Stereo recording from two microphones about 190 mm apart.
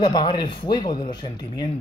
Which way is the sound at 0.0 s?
20° left (ahead or behind).